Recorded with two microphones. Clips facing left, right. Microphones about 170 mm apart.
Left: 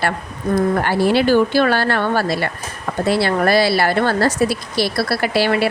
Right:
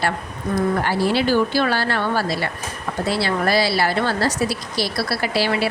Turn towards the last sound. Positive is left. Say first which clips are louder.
# left 4 dB
turn(degrees=55)  # may be behind; listen again after turning